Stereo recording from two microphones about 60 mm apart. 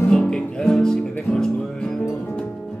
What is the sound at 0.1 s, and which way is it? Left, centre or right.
Music, centre.